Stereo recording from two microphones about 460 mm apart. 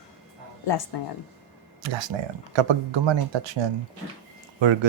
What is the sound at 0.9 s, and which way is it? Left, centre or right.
Speech, left.